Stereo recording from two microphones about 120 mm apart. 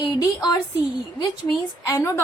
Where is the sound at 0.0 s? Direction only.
30° left (ahead or behind).